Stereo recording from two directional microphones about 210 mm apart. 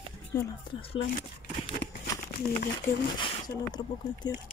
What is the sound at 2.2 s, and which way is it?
Crumpling, 40° left (ahead or behind).